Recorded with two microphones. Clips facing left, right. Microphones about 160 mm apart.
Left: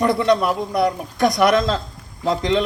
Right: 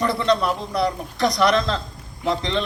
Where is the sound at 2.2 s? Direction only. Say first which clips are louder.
Left 4 dB; 20° left (ahead or behind).